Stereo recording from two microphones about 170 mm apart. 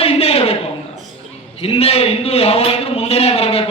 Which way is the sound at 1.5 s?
35° left (ahead or behind).